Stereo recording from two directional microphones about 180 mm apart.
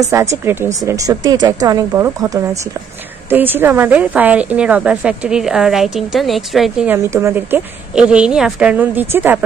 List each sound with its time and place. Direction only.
0.1 s a woman's voice: 15° right (ahead or behind)
7.0 s a woman's voice: 15° right (ahead or behind)